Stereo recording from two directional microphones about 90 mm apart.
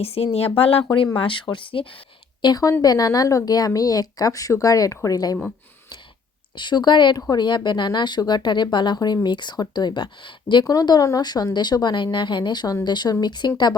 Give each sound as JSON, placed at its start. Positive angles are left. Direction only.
{"t": 0.0, "sound": "speech", "side_deg": 90}
{"t": 1.1, "sound": "speech", "side_deg": 75}
{"t": 2.4, "sound": "a woman's voice", "side_deg": 45}
{"t": 6.6, "sound": "speech", "side_deg": 55}
{"t": 10.7, "sound": "a woman's voice", "side_deg": 45}